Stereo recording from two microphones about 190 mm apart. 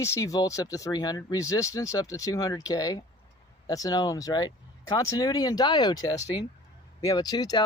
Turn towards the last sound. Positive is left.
turn(degrees=20)  # may be behind; listen again after turning